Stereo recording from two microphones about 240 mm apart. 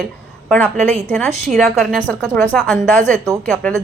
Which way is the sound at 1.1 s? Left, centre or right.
Centre.